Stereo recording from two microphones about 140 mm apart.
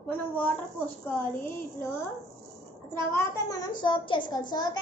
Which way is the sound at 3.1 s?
25° left (ahead or behind).